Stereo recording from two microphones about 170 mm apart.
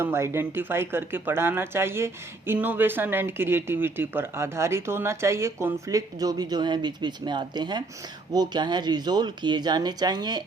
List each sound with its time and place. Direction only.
0.0 s speech: 15° right (ahead or behind)